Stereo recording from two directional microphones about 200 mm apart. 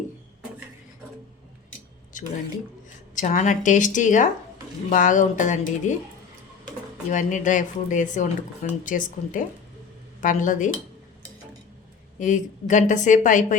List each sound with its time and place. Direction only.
2.1 s a sound: 40° left (ahead or behind)
3.2 s speech: 40° left (ahead or behind)
7.1 s speech: 40° left (ahead or behind)
12.2 s speech: 40° left (ahead or behind)